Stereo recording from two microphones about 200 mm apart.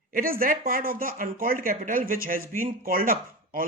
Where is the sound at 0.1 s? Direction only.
45° right (ahead or behind).